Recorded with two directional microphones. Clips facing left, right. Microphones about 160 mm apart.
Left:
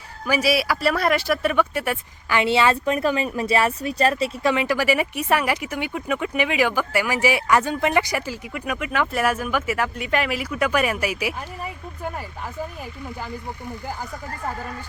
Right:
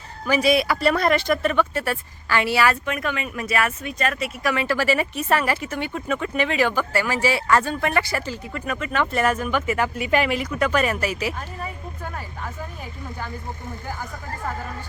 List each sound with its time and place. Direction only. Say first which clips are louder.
0.3 s speech: right 2 dB; 5° left (ahead or behind); by 4.5 s 30° left (ahead or behind)
4.5 s speech: left 1 dB; 15° left (ahead or behind)